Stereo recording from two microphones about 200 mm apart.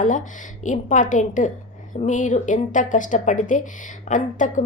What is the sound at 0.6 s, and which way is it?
A woman's voice, 40° left (ahead or behind).